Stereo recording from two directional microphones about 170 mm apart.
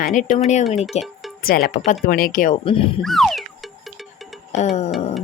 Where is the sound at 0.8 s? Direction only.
Centre (ahead or behind).